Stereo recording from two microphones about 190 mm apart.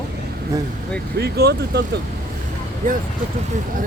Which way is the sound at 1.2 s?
55° right (ahead or behind).